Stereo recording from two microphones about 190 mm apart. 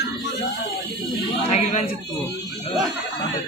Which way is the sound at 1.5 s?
35° left (ahead or behind).